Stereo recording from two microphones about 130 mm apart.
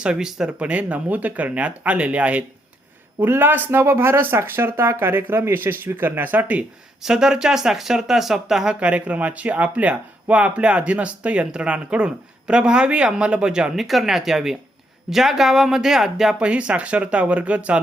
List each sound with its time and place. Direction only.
0.0 s speech: 5° right (ahead or behind)